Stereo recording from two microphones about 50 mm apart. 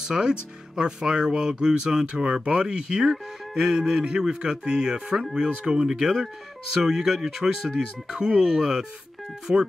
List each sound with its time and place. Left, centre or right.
0.0 s speech: centre